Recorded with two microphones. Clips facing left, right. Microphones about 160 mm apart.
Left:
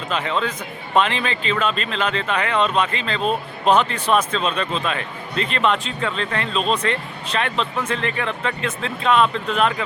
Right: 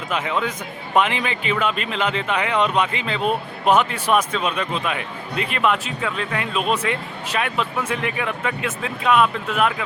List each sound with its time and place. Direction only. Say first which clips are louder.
0.1 s speech: even; 10° right (ahead or behind)